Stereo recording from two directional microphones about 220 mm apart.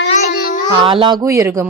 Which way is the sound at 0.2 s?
35° left (ahead or behind).